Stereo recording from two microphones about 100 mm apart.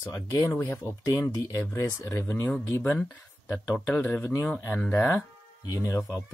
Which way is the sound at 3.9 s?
15° left (ahead or behind).